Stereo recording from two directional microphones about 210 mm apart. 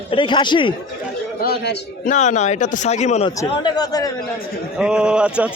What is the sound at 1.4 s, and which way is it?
Speech, 50° left (ahead or behind).